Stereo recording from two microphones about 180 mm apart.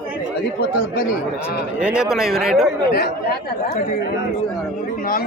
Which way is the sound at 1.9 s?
5° right (ahead or behind).